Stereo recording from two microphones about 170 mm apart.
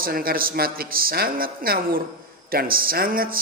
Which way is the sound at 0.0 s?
60° right (ahead or behind).